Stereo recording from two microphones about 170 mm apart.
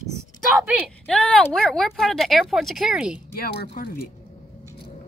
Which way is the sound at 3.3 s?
65° left (ahead or behind).